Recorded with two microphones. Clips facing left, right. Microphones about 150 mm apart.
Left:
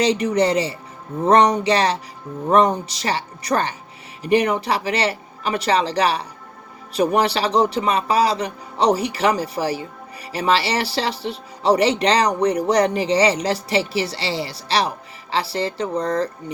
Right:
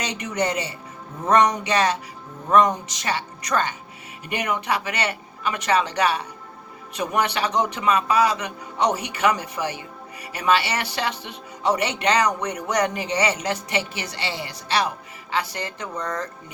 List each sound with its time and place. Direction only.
0.0 s speech: 30° left (ahead or behind)